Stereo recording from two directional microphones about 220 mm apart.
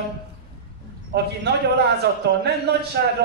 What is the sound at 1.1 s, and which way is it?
Speech, 50° right (ahead or behind).